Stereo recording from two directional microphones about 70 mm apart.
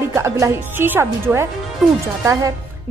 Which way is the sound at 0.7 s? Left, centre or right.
Right.